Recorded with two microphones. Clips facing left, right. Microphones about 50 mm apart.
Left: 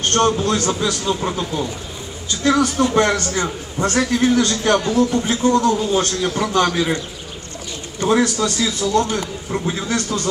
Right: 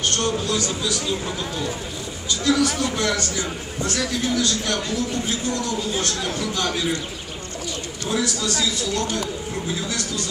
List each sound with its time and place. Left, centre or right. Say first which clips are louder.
0.0 s speech: left 6 dB; left
2.4 s a man's voice: left 4 dB; left
8.1 s a man's voice: left 8 dB; left
9.8 s a man's voice: left 6 dB; left